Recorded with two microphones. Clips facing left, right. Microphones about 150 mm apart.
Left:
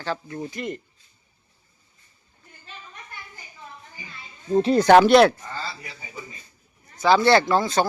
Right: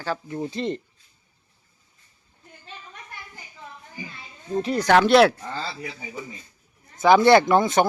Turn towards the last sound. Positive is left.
turn(degrees=-20)  # may be behind; listen again after turning